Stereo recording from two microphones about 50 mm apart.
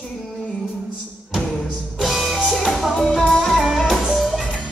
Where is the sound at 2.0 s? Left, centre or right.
Centre.